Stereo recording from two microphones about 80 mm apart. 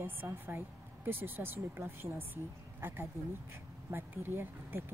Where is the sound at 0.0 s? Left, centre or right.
Right.